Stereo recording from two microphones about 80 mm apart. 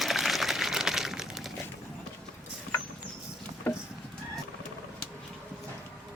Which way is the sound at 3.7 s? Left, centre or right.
Centre.